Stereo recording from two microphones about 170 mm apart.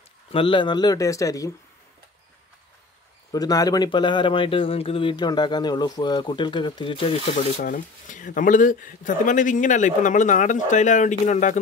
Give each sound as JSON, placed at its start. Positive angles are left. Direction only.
{"t": 0.3, "sound": "speech", "side_deg": 30}
{"t": 3.3, "sound": "speech", "side_deg": 20}
{"t": 7.6, "sound": "speech", "side_deg": 50}